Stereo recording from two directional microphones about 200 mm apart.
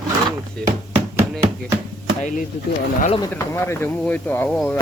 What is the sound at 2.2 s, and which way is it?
Speech, 40° left (ahead or behind).